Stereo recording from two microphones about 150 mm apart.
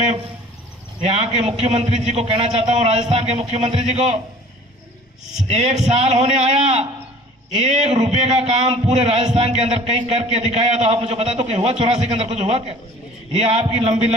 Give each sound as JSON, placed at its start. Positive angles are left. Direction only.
{"t": 1.0, "sound": "a man's voice", "side_deg": -45}
{"t": 5.5, "sound": "a man's voice", "side_deg": -45}